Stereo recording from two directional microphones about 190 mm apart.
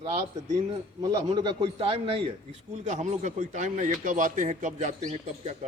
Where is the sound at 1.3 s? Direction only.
25° right (ahead or behind).